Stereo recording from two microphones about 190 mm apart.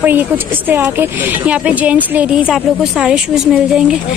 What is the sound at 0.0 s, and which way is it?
A woman's voice, 10° right (ahead or behind).